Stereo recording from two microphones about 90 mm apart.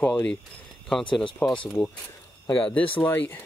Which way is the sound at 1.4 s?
25° left (ahead or behind).